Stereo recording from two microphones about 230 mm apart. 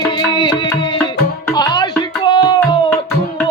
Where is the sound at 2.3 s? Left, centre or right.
Centre.